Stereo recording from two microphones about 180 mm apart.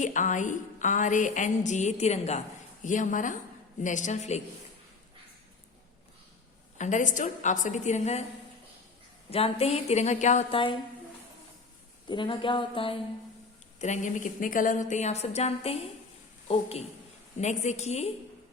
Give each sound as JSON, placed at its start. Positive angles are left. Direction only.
{"t": 0.0, "sound": "a sound", "side_deg": 45}
{"t": 3.8, "sound": "a woman's voice", "side_deg": 45}
{"t": 6.7, "sound": "a woman's voice", "side_deg": 40}
{"t": 9.3, "sound": "a woman's voice", "side_deg": 35}
{"t": 12.0, "sound": "speech", "side_deg": 25}
{"t": 13.7, "sound": "a woman's voice", "side_deg": 40}